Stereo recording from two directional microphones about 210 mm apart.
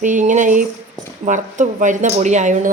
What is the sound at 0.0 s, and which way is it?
Speech, 35° right (ahead or behind).